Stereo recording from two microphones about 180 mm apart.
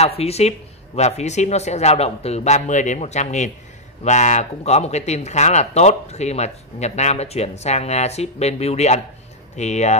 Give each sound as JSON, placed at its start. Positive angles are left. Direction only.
{"t": 0.2, "sound": "speech", "side_deg": 35}